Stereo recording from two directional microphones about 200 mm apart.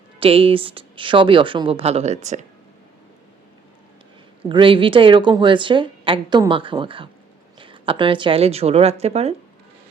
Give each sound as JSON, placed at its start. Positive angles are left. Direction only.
{"t": 0.2, "sound": "a woman's voice", "side_deg": -25}
{"t": 4.4, "sound": "a woman's voice", "side_deg": -25}